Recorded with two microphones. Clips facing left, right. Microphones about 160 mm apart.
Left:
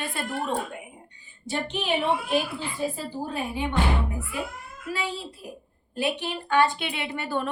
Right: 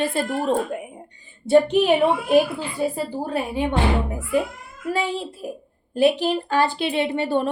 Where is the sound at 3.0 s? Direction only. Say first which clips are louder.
Right 6 dB; 75° right (ahead or behind).